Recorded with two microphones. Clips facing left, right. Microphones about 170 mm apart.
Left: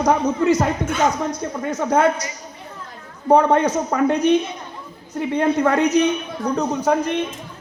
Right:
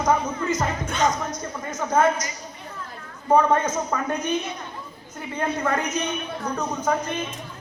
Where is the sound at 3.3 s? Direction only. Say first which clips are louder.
Left 3 dB; 70° left (ahead or behind).